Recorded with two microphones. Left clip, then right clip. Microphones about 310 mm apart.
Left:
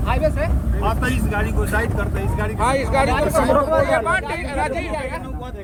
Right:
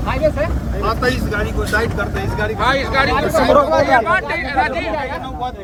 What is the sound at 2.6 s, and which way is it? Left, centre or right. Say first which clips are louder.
Speech: right 2 dB; centre.